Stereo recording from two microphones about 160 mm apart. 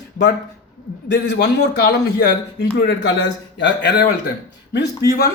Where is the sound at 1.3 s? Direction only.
90° left.